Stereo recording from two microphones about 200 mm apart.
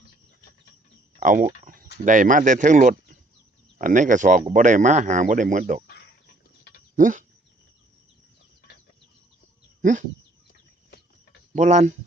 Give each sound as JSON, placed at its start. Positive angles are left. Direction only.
{"t": 1.2, "sound": "speech", "side_deg": -40}
{"t": 1.6, "sound": "cricket", "side_deg": -45}
{"t": 2.0, "sound": "speech", "side_deg": -40}
{"t": 6.9, "sound": "speech", "side_deg": -40}
{"t": 9.8, "sound": "a sound", "side_deg": -40}
{"t": 10.5, "sound": "a sound", "side_deg": 50}
{"t": 11.5, "sound": "speech", "side_deg": -35}